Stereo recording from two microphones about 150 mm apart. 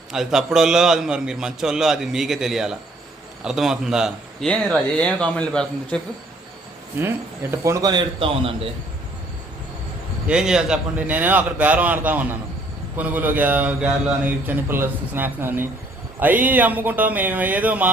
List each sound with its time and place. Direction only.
0.1 s a man's voice: 5° right (ahead or behind)
7.6 s a man's voice: 20° right (ahead or behind)
10.2 s a man's voice: 5° right (ahead or behind)